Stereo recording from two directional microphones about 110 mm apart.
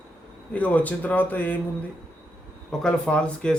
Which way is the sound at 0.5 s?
15° left (ahead or behind).